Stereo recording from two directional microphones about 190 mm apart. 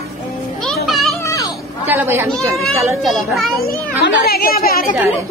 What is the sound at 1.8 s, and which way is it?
Speech, 10° right (ahead or behind).